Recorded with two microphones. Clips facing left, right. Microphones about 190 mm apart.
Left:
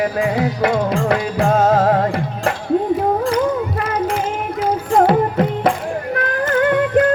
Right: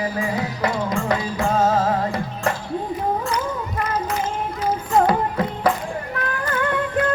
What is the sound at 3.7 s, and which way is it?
Child singing, 70° left (ahead or behind).